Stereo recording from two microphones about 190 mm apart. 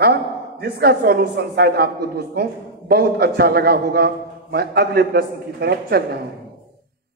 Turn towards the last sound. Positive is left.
turn(degrees=-55)  # may be behind; listen again after turning